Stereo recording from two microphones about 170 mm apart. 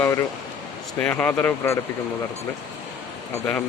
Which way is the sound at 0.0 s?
15° left (ahead or behind).